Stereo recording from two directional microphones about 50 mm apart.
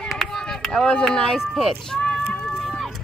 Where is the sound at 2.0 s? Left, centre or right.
Left.